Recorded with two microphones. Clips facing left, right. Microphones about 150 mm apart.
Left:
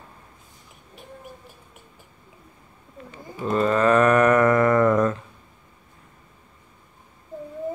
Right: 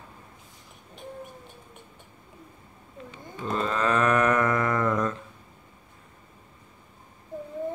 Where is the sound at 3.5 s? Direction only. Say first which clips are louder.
Left 7 dB; 50° left (ahead or behind).